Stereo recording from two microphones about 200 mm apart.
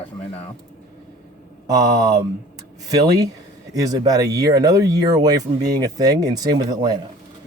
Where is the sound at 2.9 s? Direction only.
20° right (ahead or behind).